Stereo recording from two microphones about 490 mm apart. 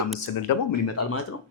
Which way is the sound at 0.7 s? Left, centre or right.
Left.